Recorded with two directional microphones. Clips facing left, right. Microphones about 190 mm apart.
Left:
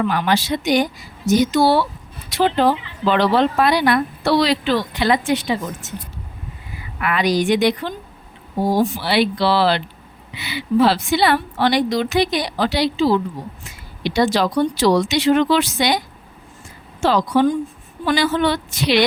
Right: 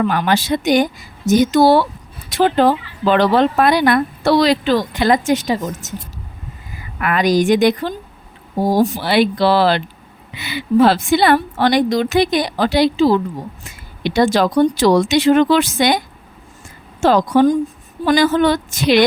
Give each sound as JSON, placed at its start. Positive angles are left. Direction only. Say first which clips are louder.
{"t": 0.0, "sound": "a woman's voice", "louder": "right 2 dB", "side_deg": -45}